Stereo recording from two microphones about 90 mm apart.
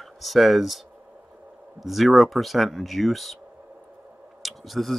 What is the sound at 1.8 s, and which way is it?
Speech, centre (ahead or behind).